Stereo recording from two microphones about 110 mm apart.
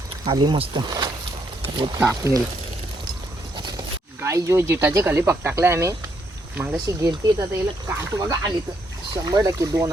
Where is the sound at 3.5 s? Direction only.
40° right (ahead or behind).